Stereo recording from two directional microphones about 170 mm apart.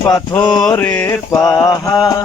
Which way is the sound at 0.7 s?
10° left (ahead or behind).